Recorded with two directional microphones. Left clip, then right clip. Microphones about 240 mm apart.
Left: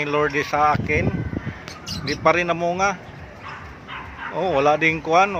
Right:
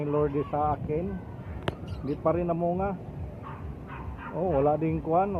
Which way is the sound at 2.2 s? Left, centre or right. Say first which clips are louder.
Left 8 dB; left.